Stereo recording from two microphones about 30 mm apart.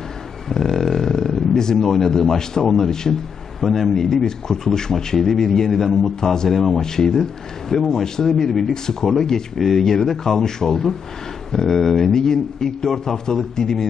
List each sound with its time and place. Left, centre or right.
0.5 s a sound: centre
1.9 s a man's voice: centre
3.6 s a man's voice: centre